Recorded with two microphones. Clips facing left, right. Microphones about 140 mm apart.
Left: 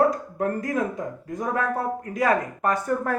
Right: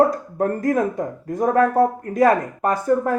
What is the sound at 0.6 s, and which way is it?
Speech, 40° right (ahead or behind).